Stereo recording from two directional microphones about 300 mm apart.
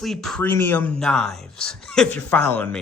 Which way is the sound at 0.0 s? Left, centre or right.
Centre.